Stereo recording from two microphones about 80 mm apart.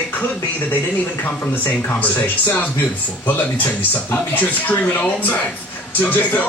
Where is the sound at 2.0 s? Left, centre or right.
Left.